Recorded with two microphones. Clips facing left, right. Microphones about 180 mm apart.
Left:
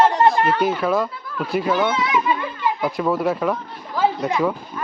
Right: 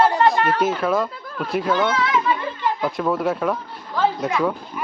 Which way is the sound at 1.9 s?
15° left (ahead or behind).